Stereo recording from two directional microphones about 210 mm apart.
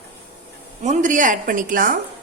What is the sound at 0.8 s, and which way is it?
A woman's voice, 35° right (ahead or behind).